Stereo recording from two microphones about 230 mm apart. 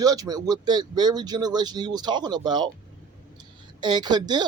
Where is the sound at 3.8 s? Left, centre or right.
Centre.